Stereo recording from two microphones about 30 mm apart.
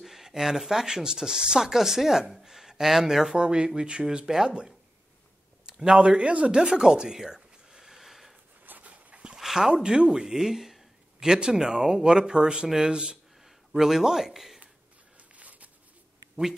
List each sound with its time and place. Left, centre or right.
0.0 s speech: centre
2.4 s a sound: centre
3.3 s speech: right
5.9 s speech: right
7.2 s speech: centre
7.7 s a sound: centre
8.6 s dog: right
9.6 s speech: right
10.1 s a sound: centre
11.2 s speech: right
13.7 s speech: centre
15.3 s a sound: right